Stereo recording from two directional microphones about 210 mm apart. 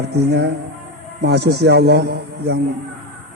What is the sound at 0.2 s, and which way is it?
A man's voice, 50° right (ahead or behind).